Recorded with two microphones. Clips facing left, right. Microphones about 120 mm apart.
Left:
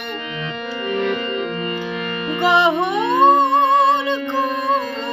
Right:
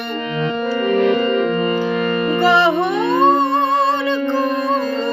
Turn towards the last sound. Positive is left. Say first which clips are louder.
# left 1 dB
turn(degrees=20)  # may be behind; listen again after turning